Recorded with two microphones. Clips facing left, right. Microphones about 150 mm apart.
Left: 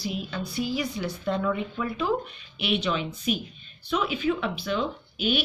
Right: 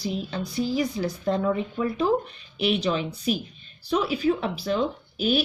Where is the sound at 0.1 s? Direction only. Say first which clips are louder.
Right 2 dB; 35° right (ahead or behind).